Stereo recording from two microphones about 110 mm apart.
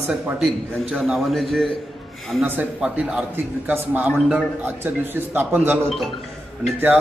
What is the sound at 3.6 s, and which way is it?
Speech, 20° right (ahead or behind).